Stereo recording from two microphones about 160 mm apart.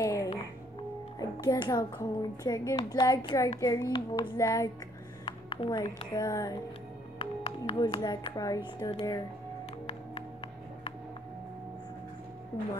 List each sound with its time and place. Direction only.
0.0 s music: 20° left (ahead or behind)
1.4 s speech: 25° left (ahead or behind)
5.2 s a sound: 35° left (ahead or behind)
6.1 s speech: 20° left (ahead or behind)
7.2 s music: 30° left (ahead or behind)
8.8 s speech: 20° left (ahead or behind)